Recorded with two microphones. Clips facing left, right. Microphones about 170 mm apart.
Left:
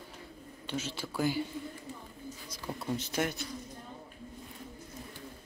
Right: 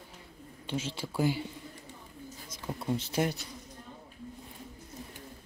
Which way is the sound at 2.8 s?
25° right (ahead or behind).